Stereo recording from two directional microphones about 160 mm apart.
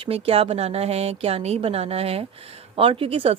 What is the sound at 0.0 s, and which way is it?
A woman's voice, 35° right (ahead or behind).